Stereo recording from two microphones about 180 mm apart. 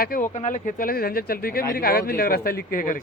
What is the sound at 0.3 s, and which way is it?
Speech, 45° left (ahead or behind).